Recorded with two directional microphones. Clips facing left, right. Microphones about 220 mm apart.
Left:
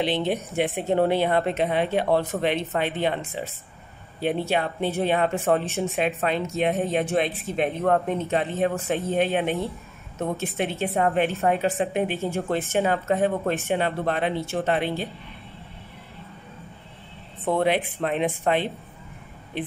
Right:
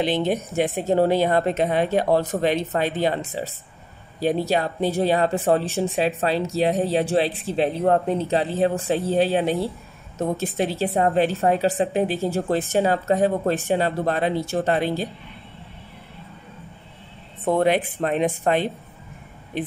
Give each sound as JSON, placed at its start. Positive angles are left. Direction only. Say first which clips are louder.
{"t": 0.0, "sound": "speech", "louder": "right 2 dB", "side_deg": -45}
{"t": 17.5, "sound": "speech", "louder": "right 3 dB", "side_deg": -40}